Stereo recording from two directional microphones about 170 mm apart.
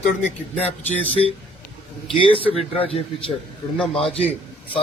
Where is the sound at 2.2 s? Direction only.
30° left (ahead or behind).